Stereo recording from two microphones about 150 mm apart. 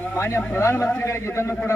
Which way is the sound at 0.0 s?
15° left (ahead or behind).